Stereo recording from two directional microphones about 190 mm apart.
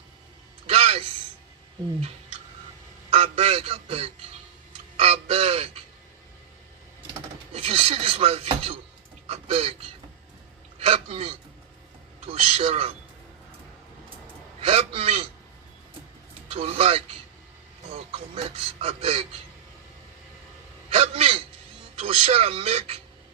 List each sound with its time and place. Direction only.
0.7 s a sound: 30° right (ahead or behind)
3.1 s a man's voice: 30° right (ahead or behind)
4.9 s a sound: 30° right (ahead or behind)
7.1 s speech: 30° right (ahead or behind)
10.8 s a man's voice: 30° right (ahead or behind)
14.6 s a man's voice: 30° right (ahead or behind)
16.5 s speech: 35° right (ahead or behind)
20.9 s a sound: 30° right (ahead or behind)
21.9 s speech: 30° right (ahead or behind)